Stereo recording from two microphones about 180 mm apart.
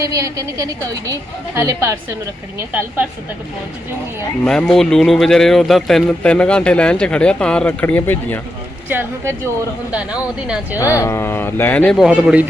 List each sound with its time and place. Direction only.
0.0 s a woman's voice: 20° right (ahead or behind)
4.4 s a man's voice: 5° left (ahead or behind)
8.9 s a woman's voice: 15° right (ahead or behind)
10.8 s speech: 15° left (ahead or behind); by 12.5 s 5° right (ahead or behind)